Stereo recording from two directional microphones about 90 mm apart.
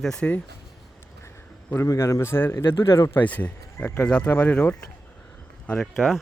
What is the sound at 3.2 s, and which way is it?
Speech, 15° left (ahead or behind).